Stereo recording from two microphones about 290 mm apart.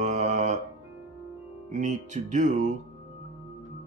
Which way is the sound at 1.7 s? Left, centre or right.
Right.